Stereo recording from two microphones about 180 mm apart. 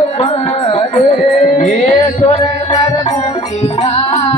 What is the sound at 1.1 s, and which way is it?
Music, 45° left (ahead or behind).